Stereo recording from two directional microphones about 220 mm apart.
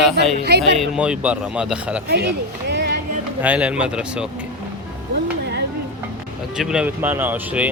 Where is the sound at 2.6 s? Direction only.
50° right (ahead or behind).